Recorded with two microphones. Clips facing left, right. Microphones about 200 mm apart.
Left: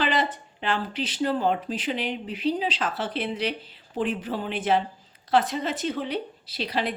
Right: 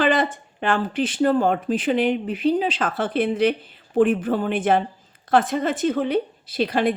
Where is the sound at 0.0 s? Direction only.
50° right (ahead or behind).